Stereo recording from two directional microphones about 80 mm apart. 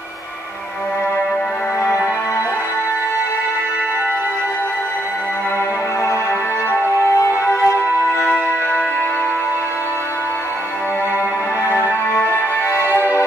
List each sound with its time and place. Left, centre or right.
7.2 s music: left
11.7 s music: left
12.7 s music: right